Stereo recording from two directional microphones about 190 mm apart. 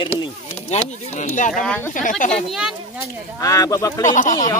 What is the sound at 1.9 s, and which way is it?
Speech, 45° left (ahead or behind).